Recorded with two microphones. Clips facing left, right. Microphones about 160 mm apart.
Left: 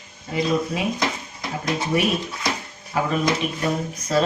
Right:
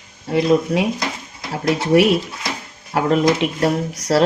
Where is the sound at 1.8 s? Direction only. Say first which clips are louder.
Right 8 dB; 75° right (ahead or behind).